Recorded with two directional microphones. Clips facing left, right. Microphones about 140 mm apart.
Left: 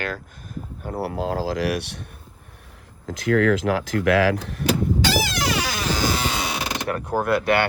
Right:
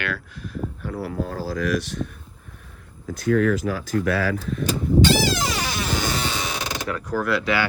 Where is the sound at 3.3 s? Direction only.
90° left.